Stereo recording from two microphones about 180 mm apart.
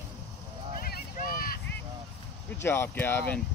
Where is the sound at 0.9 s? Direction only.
55° left (ahead or behind).